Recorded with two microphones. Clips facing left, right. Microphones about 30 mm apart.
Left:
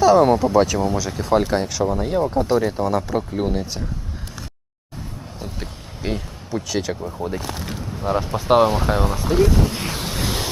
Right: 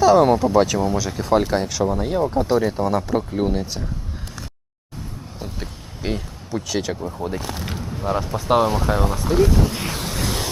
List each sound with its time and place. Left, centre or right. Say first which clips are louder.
0.0 s speech: even; centre
5.4 s a sound: even; centre
8.2 s speech: left 3 dB; centre